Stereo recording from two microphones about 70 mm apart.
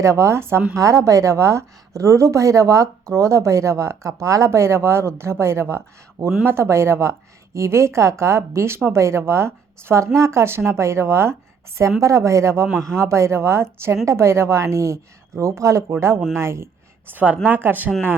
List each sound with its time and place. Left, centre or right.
0.0 s a woman's voice: right
0.7 s a woman's voice: right
17.1 s speech: right